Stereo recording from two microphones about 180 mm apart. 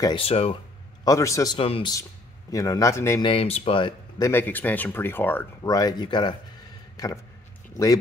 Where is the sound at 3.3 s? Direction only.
30° left (ahead or behind).